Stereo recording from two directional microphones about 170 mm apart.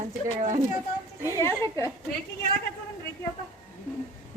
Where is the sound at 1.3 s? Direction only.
15° left (ahead or behind).